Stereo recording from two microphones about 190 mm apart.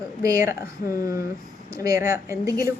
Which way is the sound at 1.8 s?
15° right (ahead or behind).